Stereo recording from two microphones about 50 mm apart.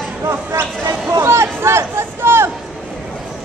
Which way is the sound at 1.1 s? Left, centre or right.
Right.